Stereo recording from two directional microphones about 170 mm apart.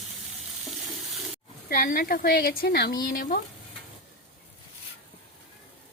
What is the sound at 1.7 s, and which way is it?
Speech, 55° left (ahead or behind).